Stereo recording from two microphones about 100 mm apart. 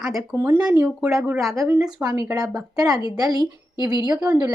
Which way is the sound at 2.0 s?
25° right (ahead or behind).